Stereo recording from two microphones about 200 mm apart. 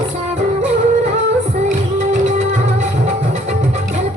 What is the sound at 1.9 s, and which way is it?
Music, 35° right (ahead or behind).